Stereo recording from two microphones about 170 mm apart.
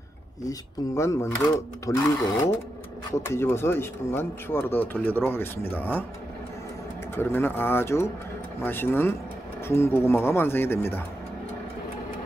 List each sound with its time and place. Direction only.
0.5 s speech: 15° left (ahead or behind)
3.1 s speech: 15° left (ahead or behind)
7.2 s speech: 10° left (ahead or behind)